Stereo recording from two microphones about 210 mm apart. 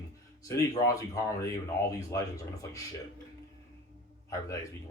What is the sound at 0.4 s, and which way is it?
Speech, 15° left (ahead or behind).